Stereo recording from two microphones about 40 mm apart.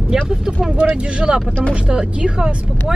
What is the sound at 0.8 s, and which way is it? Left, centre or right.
Speech, right.